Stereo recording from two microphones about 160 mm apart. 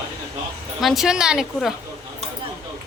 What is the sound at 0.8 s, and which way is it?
Speech, centre (ahead or behind).